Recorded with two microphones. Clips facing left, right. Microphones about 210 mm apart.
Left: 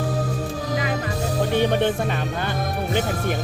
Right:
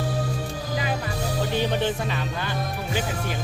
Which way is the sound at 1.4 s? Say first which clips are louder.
Left 5 dB; 55° left (ahead or behind).